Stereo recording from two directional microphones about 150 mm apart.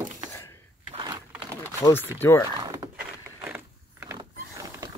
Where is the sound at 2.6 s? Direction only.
25° right (ahead or behind).